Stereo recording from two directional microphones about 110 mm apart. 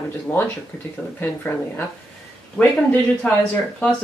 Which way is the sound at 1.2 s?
15° left (ahead or behind).